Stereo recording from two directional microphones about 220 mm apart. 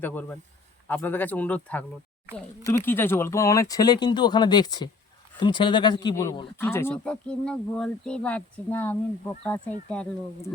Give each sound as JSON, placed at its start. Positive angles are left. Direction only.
{"t": 0.0, "sound": "speech", "side_deg": 10}